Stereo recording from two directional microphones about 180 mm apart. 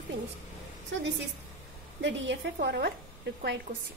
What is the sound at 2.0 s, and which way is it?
Speech, 80° right.